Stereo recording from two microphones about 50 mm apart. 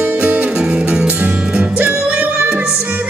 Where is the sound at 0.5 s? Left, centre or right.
Centre.